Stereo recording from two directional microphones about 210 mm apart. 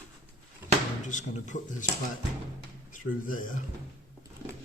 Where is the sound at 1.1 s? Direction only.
35° left (ahead or behind).